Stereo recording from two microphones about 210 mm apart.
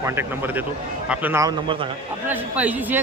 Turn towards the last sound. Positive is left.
turn(degrees=-10)  # may be behind; listen again after turning